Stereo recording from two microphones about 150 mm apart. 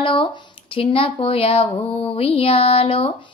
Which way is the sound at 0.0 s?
35° left (ahead or behind).